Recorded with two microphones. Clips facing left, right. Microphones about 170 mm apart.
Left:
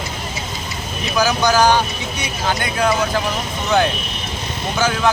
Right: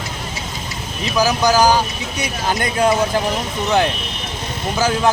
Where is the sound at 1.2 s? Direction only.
35° right (ahead or behind).